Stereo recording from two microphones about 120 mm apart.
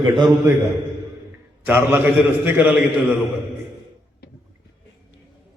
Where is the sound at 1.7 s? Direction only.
15° right (ahead or behind).